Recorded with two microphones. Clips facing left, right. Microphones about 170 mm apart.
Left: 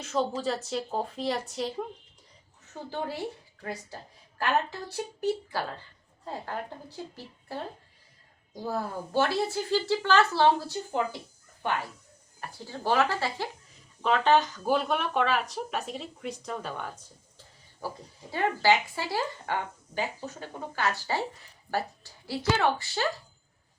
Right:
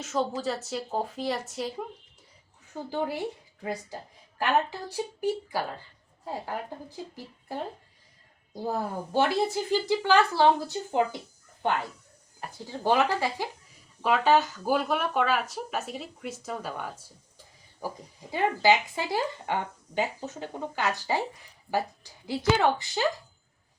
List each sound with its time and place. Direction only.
0.0 s speech: centre (ahead or behind)
2.9 s speech: 15° right (ahead or behind)
4.4 s speech: 10° right (ahead or behind)
8.6 s speech: 15° right (ahead or behind)
12.4 s speech: 20° right (ahead or behind)